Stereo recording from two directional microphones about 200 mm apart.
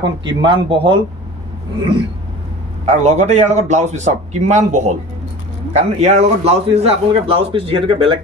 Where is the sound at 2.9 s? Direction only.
35° right (ahead or behind).